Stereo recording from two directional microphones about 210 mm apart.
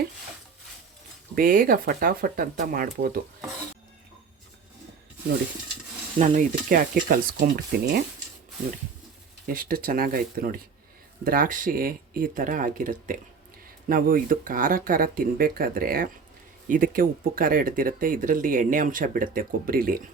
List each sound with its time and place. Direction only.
1.4 s speech: 40° right (ahead or behind)
6.1 s speech: 35° right (ahead or behind)
9.5 s speech: 45° right (ahead or behind)